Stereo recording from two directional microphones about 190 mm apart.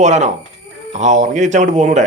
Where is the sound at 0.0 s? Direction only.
35° right (ahead or behind).